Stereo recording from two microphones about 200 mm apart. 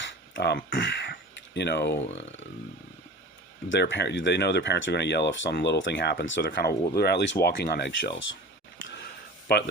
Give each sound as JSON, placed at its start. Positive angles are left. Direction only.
{"t": 0.3, "sound": "speech", "side_deg": 55}
{"t": 3.7, "sound": "speech", "side_deg": 65}
{"t": 6.4, "sound": "speech", "side_deg": 50}
{"t": 9.5, "sound": "speech", "side_deg": 55}